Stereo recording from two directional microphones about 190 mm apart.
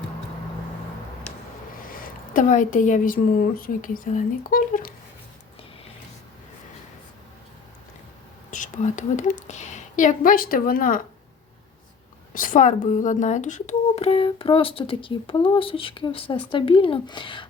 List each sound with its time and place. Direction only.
1.8 s a woman's voice: 50° left (ahead or behind)
8.4 s speech: 40° left (ahead or behind)
12.3 s speech: 45° left (ahead or behind); by 17.4 s 25° left (ahead or behind)